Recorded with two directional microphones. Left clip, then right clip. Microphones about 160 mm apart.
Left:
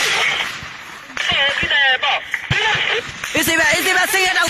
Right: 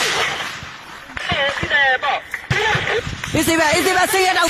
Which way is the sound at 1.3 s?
25° right (ahead or behind).